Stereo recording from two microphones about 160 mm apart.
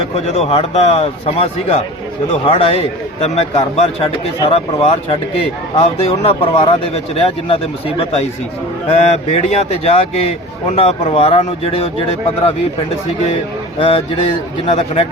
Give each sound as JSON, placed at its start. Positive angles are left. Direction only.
{"t": 0.3, "sound": "a man's voice", "side_deg": 35}
{"t": 13.7, "sound": "a man's voice", "side_deg": 35}